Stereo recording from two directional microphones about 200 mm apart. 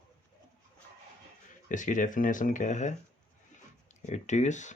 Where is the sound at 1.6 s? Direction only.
40° left (ahead or behind).